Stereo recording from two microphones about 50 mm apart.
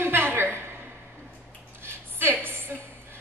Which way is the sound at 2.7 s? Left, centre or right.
Right.